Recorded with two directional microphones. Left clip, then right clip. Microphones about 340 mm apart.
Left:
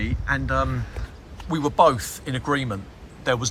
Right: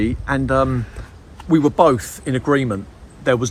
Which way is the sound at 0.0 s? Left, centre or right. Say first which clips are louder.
Right 5 dB; centre.